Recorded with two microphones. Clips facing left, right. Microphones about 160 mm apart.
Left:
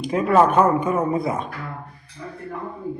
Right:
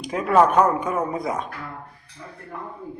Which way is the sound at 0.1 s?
Centre (ahead or behind).